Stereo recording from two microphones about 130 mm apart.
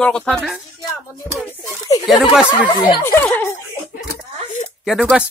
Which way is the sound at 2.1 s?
Centre (ahead or behind).